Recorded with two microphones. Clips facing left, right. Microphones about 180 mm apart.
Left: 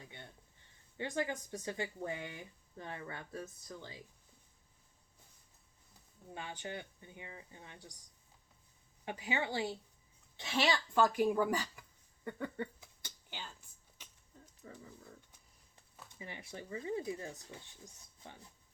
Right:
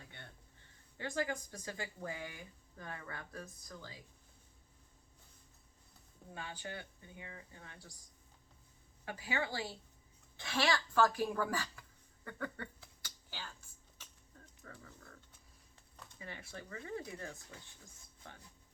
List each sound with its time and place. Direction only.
0.0 s a sound: 20° left (ahead or behind)
0.9 s speech: 20° left (ahead or behind)
6.3 s speech: 20° left (ahead or behind)
9.0 s a woman's voice: 20° left (ahead or behind)
14.6 s a sound: 20° left (ahead or behind)
16.0 s speech: 15° left (ahead or behind)